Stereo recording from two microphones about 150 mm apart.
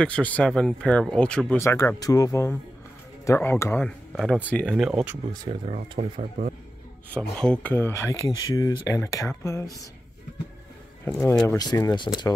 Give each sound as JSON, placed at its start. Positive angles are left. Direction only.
{"t": 0.0, "sound": "speech", "side_deg": 10}
{"t": 3.8, "sound": "speech", "side_deg": 5}
{"t": 4.7, "sound": "speech", "side_deg": -5}
{"t": 5.3, "sound": "speech", "side_deg": -25}
{"t": 5.7, "sound": "speech", "side_deg": -55}
{"t": 7.2, "sound": "speech", "side_deg": 5}
{"t": 11.1, "sound": "speech", "side_deg": 15}